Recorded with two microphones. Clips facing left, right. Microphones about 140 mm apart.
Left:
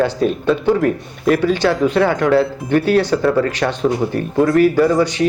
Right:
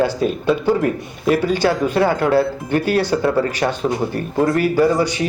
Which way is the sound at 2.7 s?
50° left (ahead or behind).